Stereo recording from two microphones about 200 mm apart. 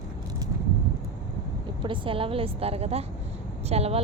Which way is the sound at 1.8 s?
25° right (ahead or behind).